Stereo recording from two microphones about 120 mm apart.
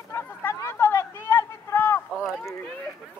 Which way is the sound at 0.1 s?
20° left (ahead or behind).